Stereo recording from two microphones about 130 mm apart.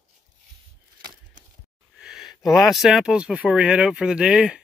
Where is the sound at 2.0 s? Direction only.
5° right (ahead or behind).